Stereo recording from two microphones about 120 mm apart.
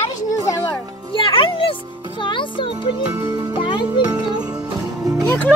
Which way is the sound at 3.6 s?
45° left (ahead or behind).